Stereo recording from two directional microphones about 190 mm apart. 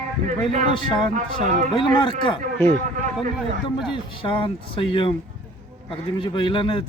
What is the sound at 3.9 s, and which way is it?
Speech, 25° left (ahead or behind).